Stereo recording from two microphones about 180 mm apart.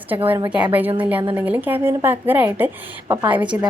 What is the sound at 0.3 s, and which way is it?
A woman's voice, 10° right (ahead or behind).